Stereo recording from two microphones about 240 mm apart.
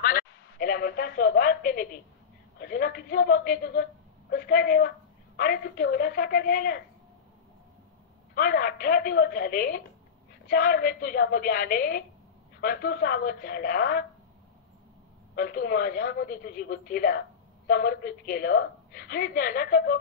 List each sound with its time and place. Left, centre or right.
0.0 s a sound: left
2.6 s a woman's voice: left
8.4 s a woman's voice: left
15.3 s a woman's voice: left